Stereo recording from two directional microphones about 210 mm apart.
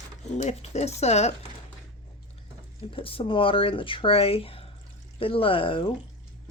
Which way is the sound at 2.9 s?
25° left (ahead or behind).